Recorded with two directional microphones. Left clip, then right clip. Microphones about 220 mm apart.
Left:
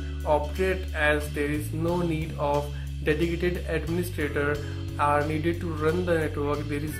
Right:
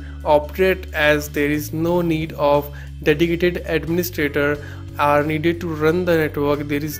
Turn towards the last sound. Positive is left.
turn(degrees=-45)  # may be behind; listen again after turning